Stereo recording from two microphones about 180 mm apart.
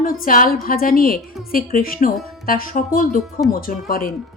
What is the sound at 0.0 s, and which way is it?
Speech, 50° left (ahead or behind).